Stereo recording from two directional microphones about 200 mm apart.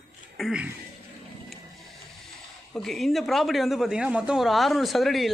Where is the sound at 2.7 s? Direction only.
Centre (ahead or behind).